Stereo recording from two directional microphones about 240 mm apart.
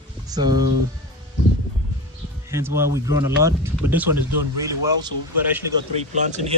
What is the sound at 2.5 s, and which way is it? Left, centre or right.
Speech, centre.